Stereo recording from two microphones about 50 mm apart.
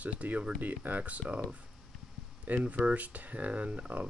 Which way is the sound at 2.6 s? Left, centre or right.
Right.